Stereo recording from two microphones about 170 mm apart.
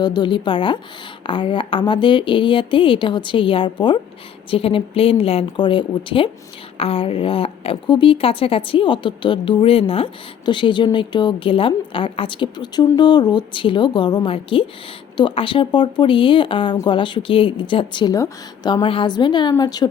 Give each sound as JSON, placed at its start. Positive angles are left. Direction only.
{"t": 0.0, "sound": "a woman's voice", "side_deg": 25}